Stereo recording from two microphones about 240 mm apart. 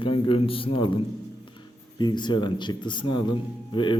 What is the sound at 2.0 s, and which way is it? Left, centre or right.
A man's voice, centre.